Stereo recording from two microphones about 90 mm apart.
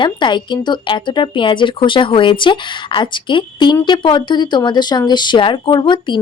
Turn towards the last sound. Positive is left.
turn(degrees=60)  # may be behind; listen again after turning